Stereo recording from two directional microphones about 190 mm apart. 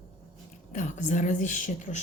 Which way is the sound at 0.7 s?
40° left (ahead or behind).